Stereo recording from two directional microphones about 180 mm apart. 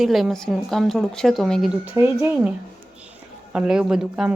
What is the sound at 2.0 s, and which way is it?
Speech, 15° right (ahead or behind).